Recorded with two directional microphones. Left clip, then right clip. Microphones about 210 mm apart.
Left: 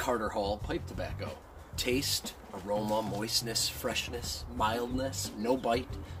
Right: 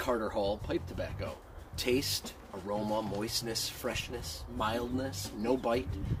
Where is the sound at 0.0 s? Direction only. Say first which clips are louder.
Even; 5° right (ahead or behind).